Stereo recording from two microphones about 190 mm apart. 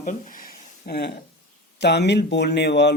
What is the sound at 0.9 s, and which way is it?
Speech, 55° left (ahead or behind).